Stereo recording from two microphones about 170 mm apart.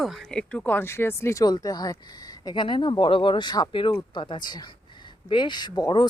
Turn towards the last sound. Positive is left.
turn(degrees=25)  # may be behind; listen again after turning